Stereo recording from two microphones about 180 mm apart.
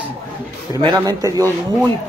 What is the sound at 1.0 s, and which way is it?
Speech, 20° right (ahead or behind).